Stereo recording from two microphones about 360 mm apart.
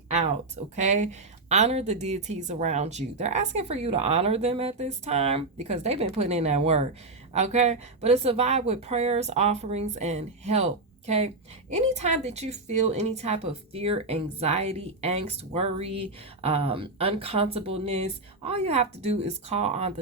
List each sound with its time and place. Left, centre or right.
0.8 s a woman's voice: centre